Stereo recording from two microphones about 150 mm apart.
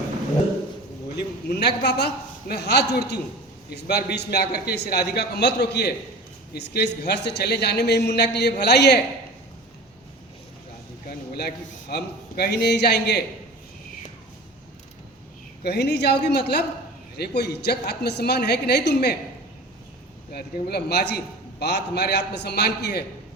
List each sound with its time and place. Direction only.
1.1 s a man's voice: 90° left
11.1 s a man's voice: 90° left
15.6 s a man's voice: 90° left
20.3 s a man's voice: 90° left